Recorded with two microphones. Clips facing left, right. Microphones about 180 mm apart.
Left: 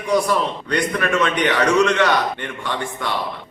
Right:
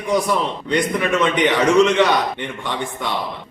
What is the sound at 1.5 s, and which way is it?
Speech, centre (ahead or behind).